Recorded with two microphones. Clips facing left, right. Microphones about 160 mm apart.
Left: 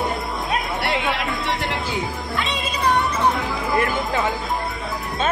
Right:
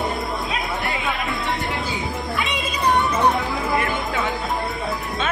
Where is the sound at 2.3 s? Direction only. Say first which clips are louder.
Left 2 dB; 15° right (ahead or behind).